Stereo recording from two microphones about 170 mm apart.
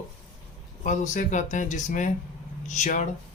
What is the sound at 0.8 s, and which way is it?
Speech, 45° left (ahead or behind).